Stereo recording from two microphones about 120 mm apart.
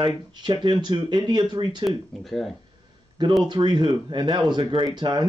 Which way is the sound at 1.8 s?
Centre (ahead or behind).